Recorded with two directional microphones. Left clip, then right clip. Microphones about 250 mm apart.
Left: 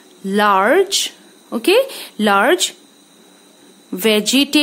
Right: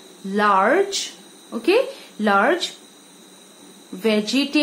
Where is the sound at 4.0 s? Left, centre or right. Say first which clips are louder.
Left 6 dB; left.